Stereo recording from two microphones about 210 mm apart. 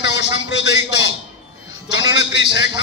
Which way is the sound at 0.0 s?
55° left (ahead or behind).